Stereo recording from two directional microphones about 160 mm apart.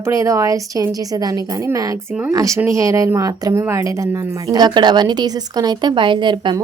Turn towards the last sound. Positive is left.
turn(degrees=-30)  # may be behind; listen again after turning